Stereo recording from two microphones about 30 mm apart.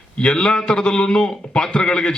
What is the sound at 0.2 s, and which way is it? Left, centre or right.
A man's voice, left.